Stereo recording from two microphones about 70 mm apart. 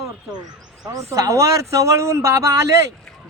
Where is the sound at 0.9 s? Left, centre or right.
Right.